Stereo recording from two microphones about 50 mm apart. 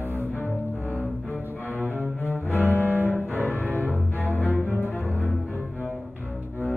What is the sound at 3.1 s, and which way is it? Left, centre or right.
Cello, left.